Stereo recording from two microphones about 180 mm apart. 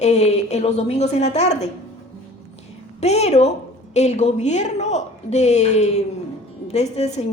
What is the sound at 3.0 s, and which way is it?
A woman's voice, 35° left (ahead or behind).